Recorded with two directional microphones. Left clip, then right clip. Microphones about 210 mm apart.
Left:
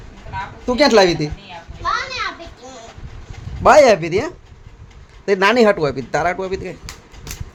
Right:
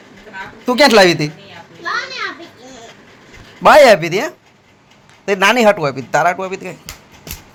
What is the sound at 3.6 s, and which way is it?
A man's voice, 5° right (ahead or behind).